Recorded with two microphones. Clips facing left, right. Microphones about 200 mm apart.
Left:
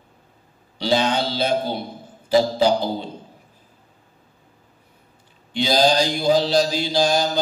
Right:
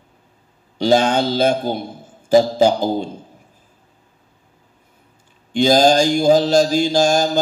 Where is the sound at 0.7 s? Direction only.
45° right (ahead or behind).